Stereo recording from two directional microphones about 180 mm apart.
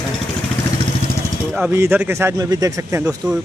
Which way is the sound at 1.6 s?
10° right (ahead or behind).